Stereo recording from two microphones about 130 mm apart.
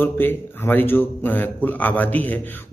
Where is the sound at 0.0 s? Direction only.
15° left (ahead or behind).